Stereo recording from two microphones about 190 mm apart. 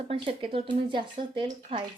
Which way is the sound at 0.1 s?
30° right (ahead or behind).